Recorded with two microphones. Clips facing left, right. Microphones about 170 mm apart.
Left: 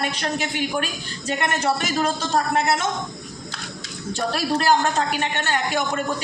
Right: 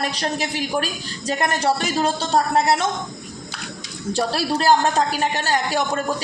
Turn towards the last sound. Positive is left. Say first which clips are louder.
# right 2 dB
turn(degrees=-35)  # may be behind; listen again after turning